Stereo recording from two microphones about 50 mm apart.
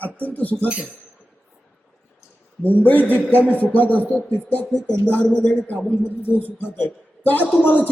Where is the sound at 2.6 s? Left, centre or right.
Left.